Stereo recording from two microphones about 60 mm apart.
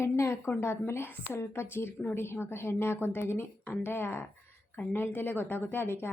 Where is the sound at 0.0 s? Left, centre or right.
Left.